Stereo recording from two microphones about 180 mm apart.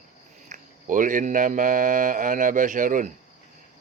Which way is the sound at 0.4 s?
45° right (ahead or behind).